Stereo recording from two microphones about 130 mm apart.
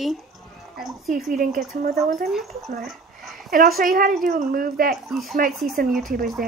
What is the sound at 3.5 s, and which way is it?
A woman's voice, 90° right.